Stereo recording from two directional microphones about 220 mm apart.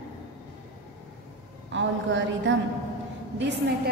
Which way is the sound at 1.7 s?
55° right (ahead or behind).